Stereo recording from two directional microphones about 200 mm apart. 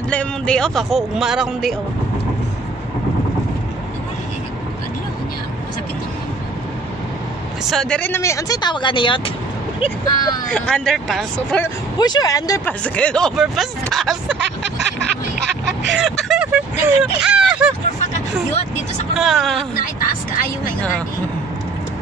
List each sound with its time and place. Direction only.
0.1 s speech: 5° left (ahead or behind)
7.7 s speech: 5° left (ahead or behind); by 10.4 s 20° left (ahead or behind)
10.5 s speech: 5° left (ahead or behind)
11.6 s speech: 20° left (ahead or behind); by 14.4 s centre (ahead or behind)
14.4 s music: 60° right (ahead or behind)
15.9 s speech: centre (ahead or behind)
18.1 s speech: 35° left (ahead or behind)
19.1 s speech: centre (ahead or behind)
19.7 s speech: 45° left (ahead or behind)